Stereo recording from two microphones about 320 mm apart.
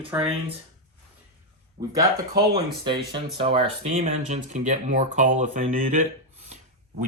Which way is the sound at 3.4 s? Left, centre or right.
Centre.